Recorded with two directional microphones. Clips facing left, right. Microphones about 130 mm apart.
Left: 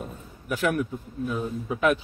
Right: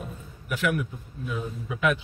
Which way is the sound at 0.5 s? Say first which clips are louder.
Left 2 dB; 35° left (ahead or behind).